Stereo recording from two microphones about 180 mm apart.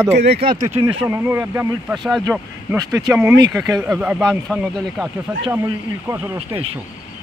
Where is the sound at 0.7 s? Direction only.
30° right (ahead or behind).